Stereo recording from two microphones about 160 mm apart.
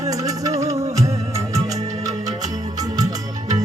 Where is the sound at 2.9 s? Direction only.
25° right (ahead or behind).